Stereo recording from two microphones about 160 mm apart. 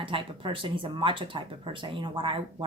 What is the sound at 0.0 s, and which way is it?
A woman's voice, 30° right (ahead or behind).